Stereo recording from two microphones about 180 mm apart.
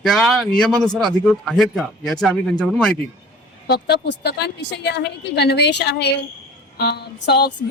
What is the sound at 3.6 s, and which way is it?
A woman's voice, 65° left (ahead or behind).